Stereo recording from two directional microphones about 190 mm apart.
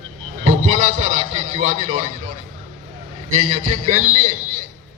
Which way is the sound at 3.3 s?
35° right (ahead or behind).